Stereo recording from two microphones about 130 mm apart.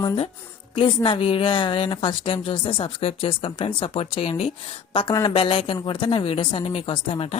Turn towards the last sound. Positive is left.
turn(degrees=45)  # may be behind; listen again after turning